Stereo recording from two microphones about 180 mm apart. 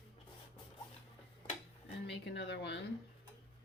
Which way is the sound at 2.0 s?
70° left (ahead or behind).